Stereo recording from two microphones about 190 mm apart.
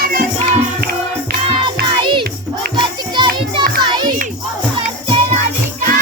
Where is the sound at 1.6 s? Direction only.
25° right (ahead or behind).